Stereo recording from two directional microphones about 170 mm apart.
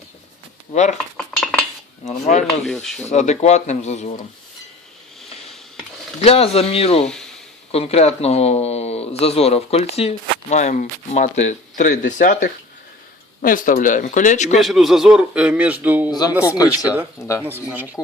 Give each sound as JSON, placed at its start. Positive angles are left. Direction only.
{"t": 0.7, "sound": "speech", "side_deg": 45}
{"t": 1.3, "sound": "cutlery", "side_deg": 5}
{"t": 2.0, "sound": "speech", "side_deg": 40}
{"t": 2.6, "sound": "speech", "side_deg": 5}
{"t": 3.1, "sound": "speech", "side_deg": 40}
{"t": 6.1, "sound": "speech", "side_deg": 35}
{"t": 7.0, "sound": "speech", "side_deg": 5}
{"t": 7.7, "sound": "speech", "side_deg": 35}
{"t": 14.6, "sound": "a man's voice", "side_deg": 0}